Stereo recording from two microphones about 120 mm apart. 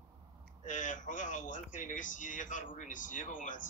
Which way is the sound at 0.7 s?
90° left.